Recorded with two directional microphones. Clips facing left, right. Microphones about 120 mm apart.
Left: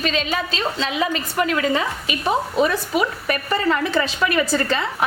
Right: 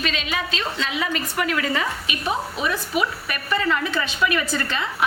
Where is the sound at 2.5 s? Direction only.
40° left (ahead or behind).